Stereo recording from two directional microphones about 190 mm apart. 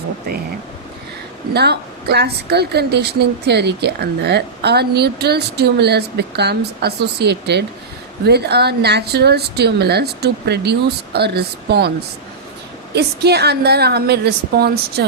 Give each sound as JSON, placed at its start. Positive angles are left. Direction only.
{"t": 1.5, "sound": "a woman's voice", "side_deg": -60}
{"t": 12.9, "sound": "a woman's voice", "side_deg": -60}